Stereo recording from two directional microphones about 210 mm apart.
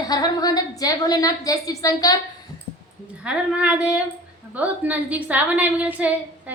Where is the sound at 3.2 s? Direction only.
5° right (ahead or behind).